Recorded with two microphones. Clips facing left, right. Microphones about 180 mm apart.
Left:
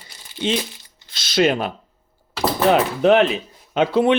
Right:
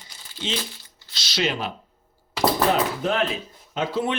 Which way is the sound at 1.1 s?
50° left (ahead or behind).